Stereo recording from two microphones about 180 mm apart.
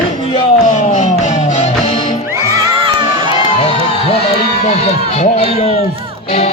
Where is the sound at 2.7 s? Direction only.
30° right (ahead or behind).